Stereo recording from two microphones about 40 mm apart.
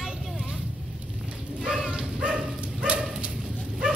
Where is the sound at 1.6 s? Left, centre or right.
Right.